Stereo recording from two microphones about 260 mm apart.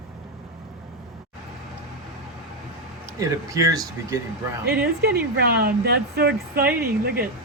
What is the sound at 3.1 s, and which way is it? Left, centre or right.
Speech, centre.